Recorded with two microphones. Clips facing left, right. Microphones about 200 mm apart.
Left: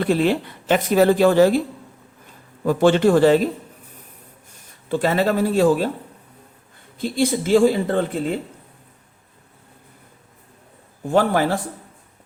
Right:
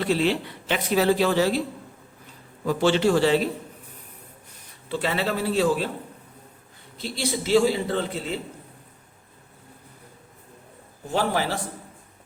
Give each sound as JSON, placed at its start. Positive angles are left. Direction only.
{"t": 0.0, "sound": "speech", "side_deg": 50}
{"t": 2.6, "sound": "speech", "side_deg": 50}
{"t": 4.9, "sound": "speech", "side_deg": 45}
{"t": 7.0, "sound": "speech", "side_deg": 50}
{"t": 11.0, "sound": "speech", "side_deg": 50}